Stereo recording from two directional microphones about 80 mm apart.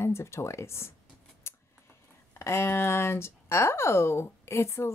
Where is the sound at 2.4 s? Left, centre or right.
Left.